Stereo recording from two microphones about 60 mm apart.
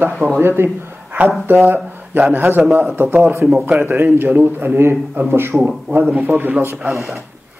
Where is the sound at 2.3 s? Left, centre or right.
Right.